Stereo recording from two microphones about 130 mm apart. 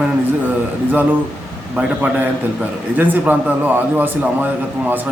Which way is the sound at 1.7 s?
10° right (ahead or behind).